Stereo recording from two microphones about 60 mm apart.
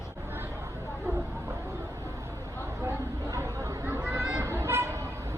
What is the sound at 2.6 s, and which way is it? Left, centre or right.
Chatter, right.